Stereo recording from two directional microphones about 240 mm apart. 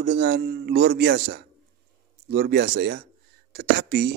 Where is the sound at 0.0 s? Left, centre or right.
Right.